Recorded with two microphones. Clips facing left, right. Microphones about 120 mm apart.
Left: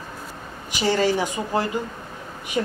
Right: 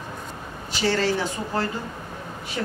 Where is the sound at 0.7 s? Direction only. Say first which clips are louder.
Left 2 dB; 15° left (ahead or behind).